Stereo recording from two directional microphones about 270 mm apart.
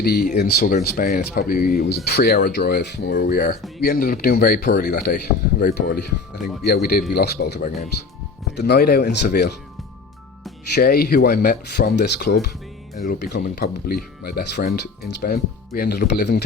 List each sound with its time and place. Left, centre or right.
0.0 s speech: left
6.4 s speech: centre
6.7 s speech: left
10.8 s speech: left